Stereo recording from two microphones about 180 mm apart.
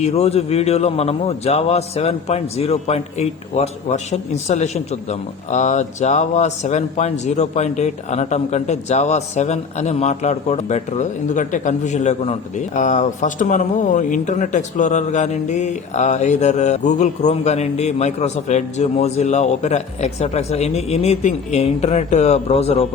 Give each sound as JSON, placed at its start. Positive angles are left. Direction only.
{"t": 0.0, "sound": "a man's voice", "side_deg": 35}